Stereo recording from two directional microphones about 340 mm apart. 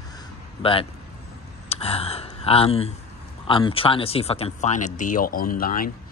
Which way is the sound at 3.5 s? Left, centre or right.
Centre.